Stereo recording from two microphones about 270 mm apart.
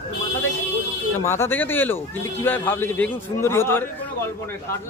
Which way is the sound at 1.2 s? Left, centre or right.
Centre.